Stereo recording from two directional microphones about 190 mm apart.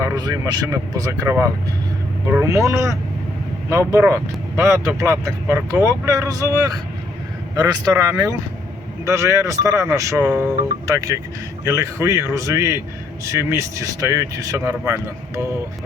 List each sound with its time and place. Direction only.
0.0 s speech: 20° right (ahead or behind)